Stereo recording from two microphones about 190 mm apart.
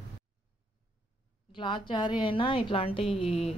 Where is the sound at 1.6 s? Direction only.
25° left (ahead or behind).